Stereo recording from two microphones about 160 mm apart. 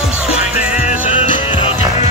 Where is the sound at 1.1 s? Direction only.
35° left (ahead or behind).